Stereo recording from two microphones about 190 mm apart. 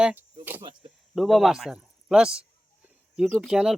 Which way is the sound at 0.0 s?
10° right (ahead or behind).